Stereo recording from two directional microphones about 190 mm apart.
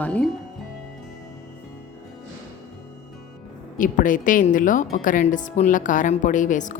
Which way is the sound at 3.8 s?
45° left (ahead or behind).